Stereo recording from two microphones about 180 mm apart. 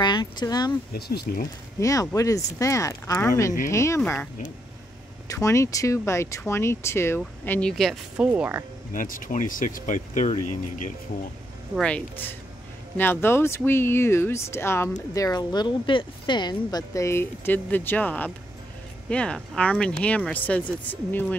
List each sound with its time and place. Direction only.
0.0 s speech: 25° left (ahead or behind)
0.9 s speech: 60° left (ahead or behind)
1.8 s speech: 20° left (ahead or behind)
5.3 s speech: 15° left (ahead or behind); by 8.3 s centre (ahead or behind)
8.3 s speech: 10° right (ahead or behind)
8.9 s speech: 50° left (ahead or behind)
11.7 s speech: 5° left (ahead or behind)